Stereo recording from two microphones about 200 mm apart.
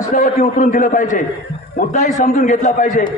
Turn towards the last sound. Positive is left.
turn(degrees=40)  # may be behind; listen again after turning